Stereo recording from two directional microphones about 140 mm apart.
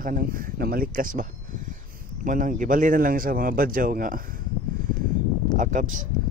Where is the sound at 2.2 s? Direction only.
70° right (ahead or behind).